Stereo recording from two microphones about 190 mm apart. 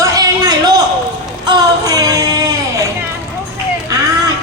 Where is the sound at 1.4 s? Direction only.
20° right (ahead or behind).